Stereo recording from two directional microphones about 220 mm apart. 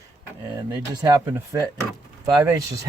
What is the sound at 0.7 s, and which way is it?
Speech, 15° right (ahead or behind).